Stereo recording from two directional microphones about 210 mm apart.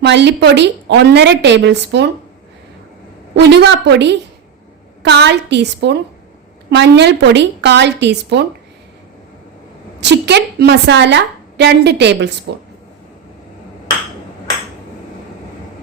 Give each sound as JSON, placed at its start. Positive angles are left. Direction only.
{"t": 0.0, "sound": "a woman's voice", "side_deg": -55}
{"t": 3.3, "sound": "a woman's voice", "side_deg": -55}
{"t": 10.0, "sound": "a woman's voice", "side_deg": -55}